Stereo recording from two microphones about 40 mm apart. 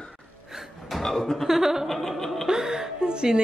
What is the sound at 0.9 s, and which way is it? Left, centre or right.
Chuckle, centre.